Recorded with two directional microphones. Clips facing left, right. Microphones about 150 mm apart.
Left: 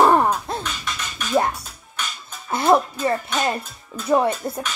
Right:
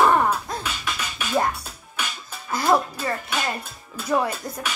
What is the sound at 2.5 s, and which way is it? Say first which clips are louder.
Speech: left 4 dB; 25° left (ahead or behind).